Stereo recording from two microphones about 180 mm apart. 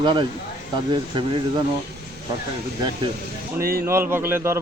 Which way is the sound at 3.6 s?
55° right (ahead or behind).